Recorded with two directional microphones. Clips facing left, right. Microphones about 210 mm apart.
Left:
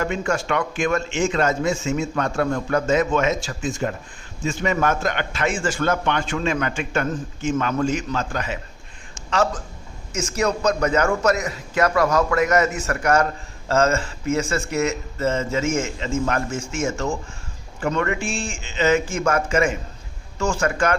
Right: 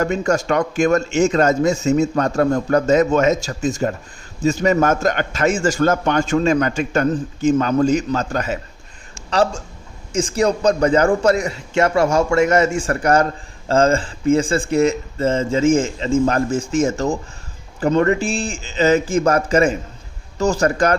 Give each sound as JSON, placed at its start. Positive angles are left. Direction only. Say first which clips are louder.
{"t": 0.0, "sound": "a man's voice", "louder": "right 5 dB", "side_deg": -40}
{"t": 9.3, "sound": "a man's voice", "louder": "right 4 dB", "side_deg": -30}